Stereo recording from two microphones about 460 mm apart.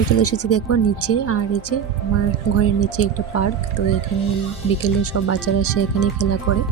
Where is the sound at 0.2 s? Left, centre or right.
Left.